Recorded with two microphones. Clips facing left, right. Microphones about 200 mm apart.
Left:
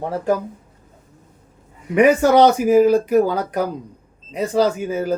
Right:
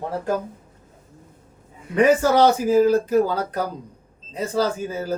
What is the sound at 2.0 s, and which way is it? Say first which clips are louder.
Speech: left 3 dB; 15° left (ahead or behind).